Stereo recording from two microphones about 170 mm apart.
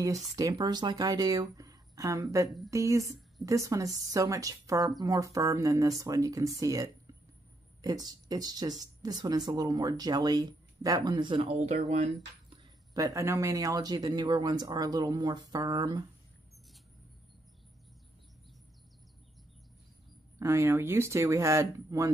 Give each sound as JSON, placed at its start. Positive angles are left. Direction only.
{"t": 0.4, "sound": "speech", "side_deg": -20}
{"t": 11.5, "sound": "speech", "side_deg": -40}
{"t": 12.9, "sound": "speech", "side_deg": -20}
{"t": 20.3, "sound": "speech", "side_deg": -15}